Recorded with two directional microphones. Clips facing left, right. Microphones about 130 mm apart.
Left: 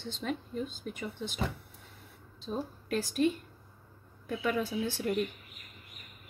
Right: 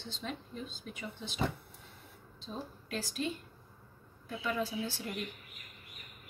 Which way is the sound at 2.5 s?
50° left (ahead or behind).